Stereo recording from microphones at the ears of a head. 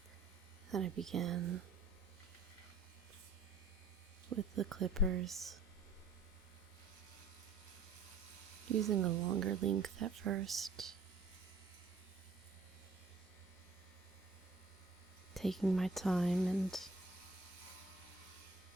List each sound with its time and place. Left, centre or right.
0.7 s speech: right
4.3 s speech: right
8.6 s speech: right
15.3 s speech: centre